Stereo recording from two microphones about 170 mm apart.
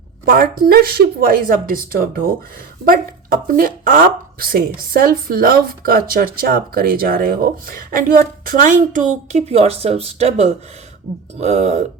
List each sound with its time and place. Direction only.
0.3 s speech: 60° right (ahead or behind); by 11.9 s 40° right (ahead or behind)